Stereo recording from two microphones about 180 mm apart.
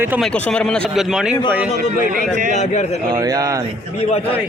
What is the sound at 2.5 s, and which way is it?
Speech, 40° left (ahead or behind).